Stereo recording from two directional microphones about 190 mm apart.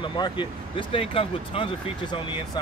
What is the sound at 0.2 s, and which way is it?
Speech, 25° left (ahead or behind).